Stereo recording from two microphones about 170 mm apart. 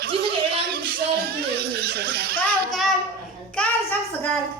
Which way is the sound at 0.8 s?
65° right (ahead or behind).